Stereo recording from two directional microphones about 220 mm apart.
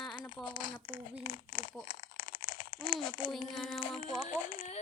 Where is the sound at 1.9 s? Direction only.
40° left (ahead or behind).